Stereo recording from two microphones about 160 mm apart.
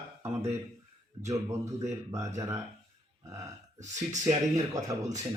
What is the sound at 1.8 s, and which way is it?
Speech, 20° right (ahead or behind).